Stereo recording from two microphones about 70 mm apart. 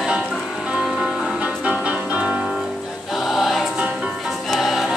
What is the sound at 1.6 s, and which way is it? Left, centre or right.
Music, centre.